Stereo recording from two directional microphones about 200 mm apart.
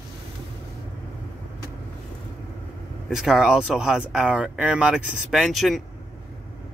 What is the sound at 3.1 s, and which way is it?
Speech, centre (ahead or behind).